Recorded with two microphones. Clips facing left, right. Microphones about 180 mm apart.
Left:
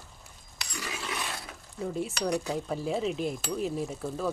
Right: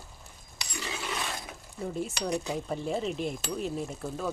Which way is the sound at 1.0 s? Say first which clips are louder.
Right 1 dB; 10° right (ahead or behind).